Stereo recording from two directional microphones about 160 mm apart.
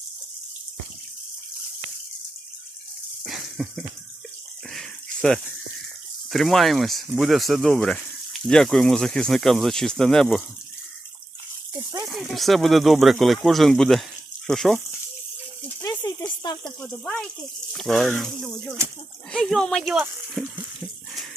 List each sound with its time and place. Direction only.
3.2 s a sound: centre (ahead or behind)
6.3 s speech: centre (ahead or behind)
11.7 s water: 25° right (ahead or behind)
12.0 s speech: centre (ahead or behind)
15.8 s a sound: 25° left (ahead or behind)
16.4 s sizzle: 25° left (ahead or behind)
16.8 s speech: 5° left (ahead or behind)